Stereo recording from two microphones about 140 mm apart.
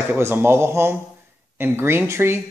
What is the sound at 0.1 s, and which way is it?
Speech, 15° right (ahead or behind).